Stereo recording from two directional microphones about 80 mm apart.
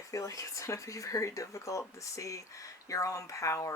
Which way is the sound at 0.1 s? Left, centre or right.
Left.